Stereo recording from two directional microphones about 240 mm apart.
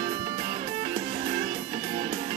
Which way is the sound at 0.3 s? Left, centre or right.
Centre.